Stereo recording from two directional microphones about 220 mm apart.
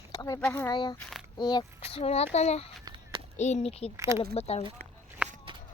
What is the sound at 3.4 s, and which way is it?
Speech, 30° left (ahead or behind).